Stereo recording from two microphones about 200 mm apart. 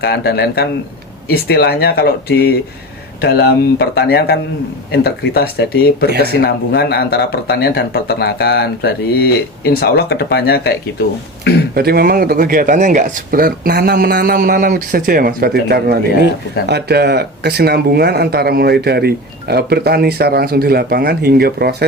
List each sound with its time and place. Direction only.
0.0 s speech: 55° left (ahead or behind)
11.7 s speech: 50° right (ahead or behind)